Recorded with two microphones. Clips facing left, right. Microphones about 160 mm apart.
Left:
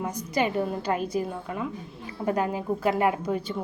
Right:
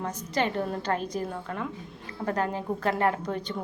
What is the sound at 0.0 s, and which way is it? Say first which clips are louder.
A woman's voice: left 2 dB; 10° left (ahead or behind).